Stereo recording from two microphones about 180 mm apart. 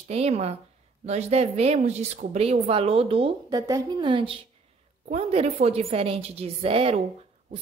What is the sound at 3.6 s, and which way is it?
A woman's voice, 20° right (ahead or behind).